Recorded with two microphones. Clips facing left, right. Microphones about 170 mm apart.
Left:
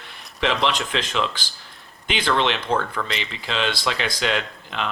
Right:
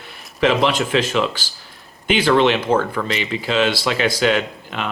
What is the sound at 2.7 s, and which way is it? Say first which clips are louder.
Speech: right 5 dB; 5° right (ahead or behind).